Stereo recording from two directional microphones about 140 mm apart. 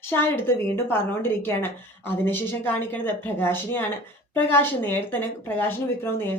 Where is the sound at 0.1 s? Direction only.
15° left (ahead or behind).